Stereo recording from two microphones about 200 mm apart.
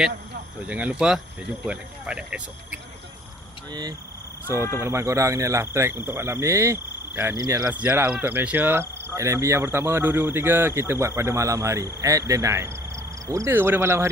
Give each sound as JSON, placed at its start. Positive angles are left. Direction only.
{"t": 0.7, "sound": "speech", "side_deg": -5}
{"t": 4.5, "sound": "speech", "side_deg": 15}
{"t": 4.8, "sound": "speech", "side_deg": -15}